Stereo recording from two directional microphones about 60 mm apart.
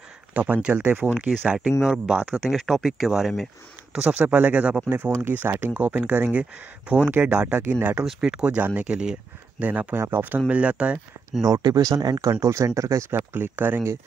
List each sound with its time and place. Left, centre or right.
0.3 s speech: right
2.5 s speech: centre
3.9 s speech: centre
4.2 s speech: right
5.3 s speech: right
5.8 s speech: right
8.0 s speech: centre
8.5 s speech: right
8.8 s speech: centre
9.6 s speech: right
11.4 s speech: right
13.1 s speech: right